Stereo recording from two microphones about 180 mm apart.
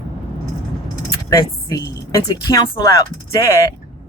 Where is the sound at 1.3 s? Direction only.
20° left (ahead or behind).